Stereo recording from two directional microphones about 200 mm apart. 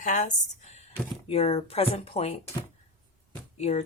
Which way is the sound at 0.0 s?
40° left (ahead or behind).